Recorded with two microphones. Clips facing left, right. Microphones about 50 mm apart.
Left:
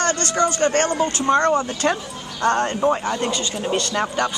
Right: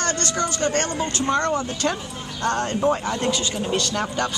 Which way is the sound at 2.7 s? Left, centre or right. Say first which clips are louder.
Left 2 dB; centre.